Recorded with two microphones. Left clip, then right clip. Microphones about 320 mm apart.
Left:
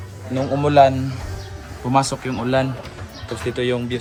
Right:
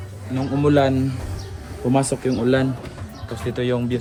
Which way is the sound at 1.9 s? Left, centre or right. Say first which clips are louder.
Left 2 dB; left.